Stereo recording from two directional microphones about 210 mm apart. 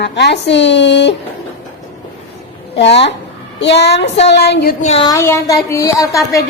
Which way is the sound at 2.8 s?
55° left (ahead or behind).